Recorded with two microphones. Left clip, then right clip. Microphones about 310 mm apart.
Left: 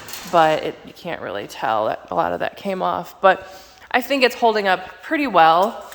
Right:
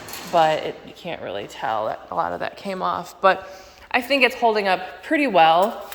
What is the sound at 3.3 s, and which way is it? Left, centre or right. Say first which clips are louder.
A man's voice: left 3 dB; centre.